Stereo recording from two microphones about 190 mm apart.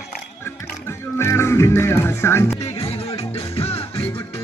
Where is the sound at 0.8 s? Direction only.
15° left (ahead or behind).